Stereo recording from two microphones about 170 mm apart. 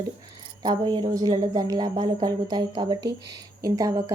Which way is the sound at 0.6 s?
25° right (ahead or behind).